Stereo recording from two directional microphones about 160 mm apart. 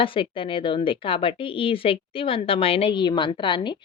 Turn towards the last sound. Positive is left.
turn(degrees=30)  # may be behind; listen again after turning